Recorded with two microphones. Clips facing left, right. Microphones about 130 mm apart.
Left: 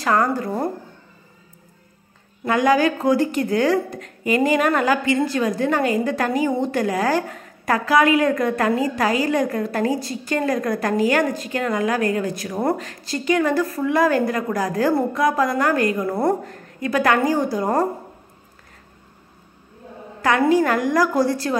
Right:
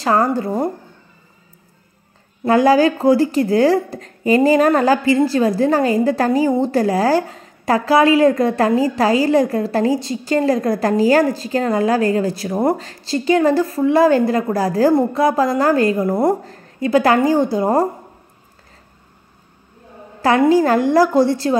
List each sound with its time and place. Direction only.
0.0 s a woman's voice: 30° right (ahead or behind)
2.4 s a woman's voice: 35° right (ahead or behind)
20.2 s a woman's voice: 30° right (ahead or behind)